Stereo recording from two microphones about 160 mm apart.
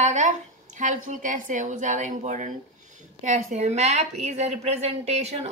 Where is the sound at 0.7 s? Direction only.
50° right (ahead or behind).